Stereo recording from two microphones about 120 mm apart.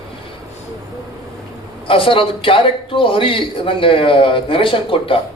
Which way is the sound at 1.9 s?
45° left (ahead or behind).